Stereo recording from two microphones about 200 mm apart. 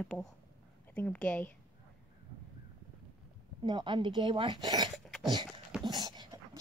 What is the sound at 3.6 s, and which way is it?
Speech, 20° right (ahead or behind).